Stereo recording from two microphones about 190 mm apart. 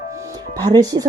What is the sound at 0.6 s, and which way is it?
Speech, 20° right (ahead or behind).